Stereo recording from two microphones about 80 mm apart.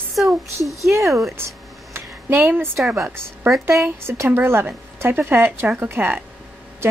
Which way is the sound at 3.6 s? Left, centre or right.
Right.